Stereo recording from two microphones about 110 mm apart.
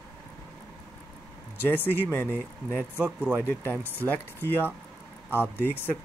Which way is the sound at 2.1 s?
20° left (ahead or behind).